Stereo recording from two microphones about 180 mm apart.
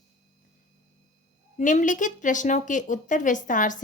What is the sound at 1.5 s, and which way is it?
A woman's voice, 45° left (ahead or behind).